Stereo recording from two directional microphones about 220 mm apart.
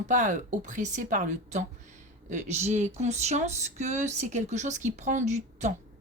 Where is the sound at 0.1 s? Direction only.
35° right (ahead or behind).